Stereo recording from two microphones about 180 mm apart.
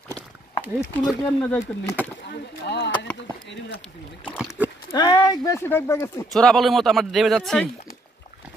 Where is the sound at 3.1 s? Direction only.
85° left.